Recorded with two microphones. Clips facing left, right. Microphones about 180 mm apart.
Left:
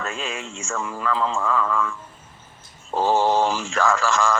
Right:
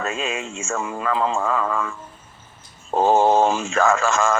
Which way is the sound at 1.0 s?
50° right (ahead or behind).